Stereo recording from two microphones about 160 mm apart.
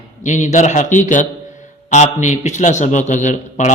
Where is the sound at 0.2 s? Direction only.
50° left (ahead or behind).